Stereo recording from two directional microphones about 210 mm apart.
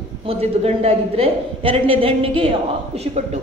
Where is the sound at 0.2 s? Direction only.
25° right (ahead or behind).